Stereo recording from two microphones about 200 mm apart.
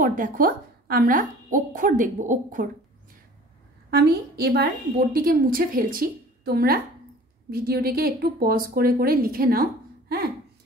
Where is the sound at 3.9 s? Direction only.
50° right (ahead or behind).